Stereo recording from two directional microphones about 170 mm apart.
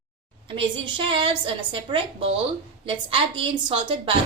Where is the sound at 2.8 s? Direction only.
30° right (ahead or behind).